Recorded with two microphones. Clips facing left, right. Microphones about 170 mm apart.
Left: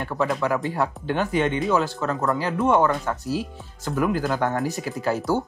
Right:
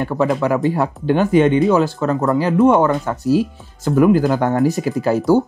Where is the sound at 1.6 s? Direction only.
25° right (ahead or behind).